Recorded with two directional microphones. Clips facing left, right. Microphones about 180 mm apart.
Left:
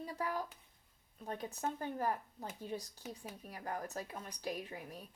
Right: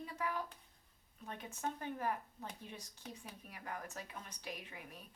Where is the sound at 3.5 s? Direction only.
35° left (ahead or behind).